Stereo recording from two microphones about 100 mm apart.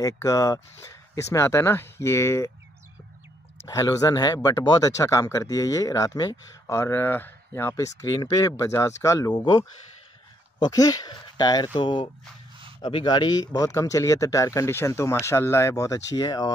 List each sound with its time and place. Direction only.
0.0 s speech: 35° left (ahead or behind)
3.6 s speech: 40° left (ahead or behind)
6.7 s speech: 25° left (ahead or behind)
9.3 s speech: 50° left (ahead or behind)
10.6 s speech: 35° left (ahead or behind)
16.2 s speech: 40° left (ahead or behind)